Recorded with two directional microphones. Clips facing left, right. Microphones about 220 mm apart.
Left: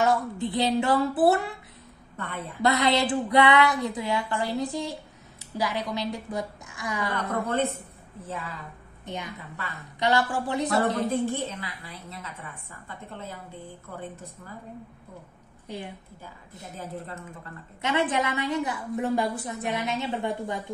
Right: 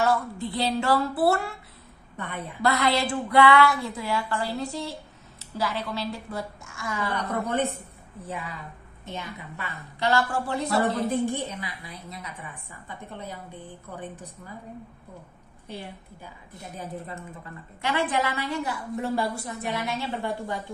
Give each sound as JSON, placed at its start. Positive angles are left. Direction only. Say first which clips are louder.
{"t": 0.0, "sound": "a woman's voice", "louder": "left 1 dB", "side_deg": 15}
{"t": 2.1, "sound": "a woman's voice", "louder": "even", "side_deg": -15}
{"t": 2.6, "sound": "a woman's voice", "louder": "left 1 dB", "side_deg": 20}
{"t": 7.4, "sound": "a woman's voice", "louder": "even", "side_deg": -15}
{"t": 9.0, "sound": "a woman's voice", "louder": "left 1 dB", "side_deg": 15}
{"t": 10.8, "sound": "a woman's voice", "louder": "right 3 dB", "side_deg": -15}
{"t": 16.7, "sound": "a woman's voice", "louder": "even", "side_deg": -15}
{"t": 17.8, "sound": "a woman's voice", "louder": "left 1 dB", "side_deg": 20}